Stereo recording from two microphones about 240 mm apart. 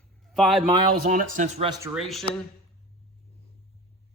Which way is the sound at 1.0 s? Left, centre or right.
Right.